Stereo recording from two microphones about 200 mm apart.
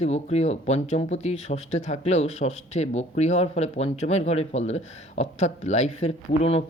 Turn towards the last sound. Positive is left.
turn(degrees=30)  # may be behind; listen again after turning